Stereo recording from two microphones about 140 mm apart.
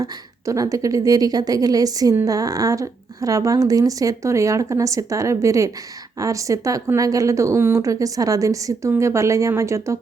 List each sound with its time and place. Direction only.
0.0 s a woman's voice: 25° right (ahead or behind)